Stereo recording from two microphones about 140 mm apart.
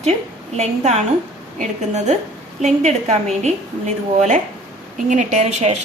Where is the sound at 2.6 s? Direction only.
55° right (ahead or behind).